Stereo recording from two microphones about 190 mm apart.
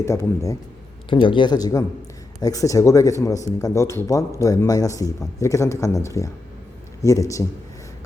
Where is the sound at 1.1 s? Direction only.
25° left (ahead or behind).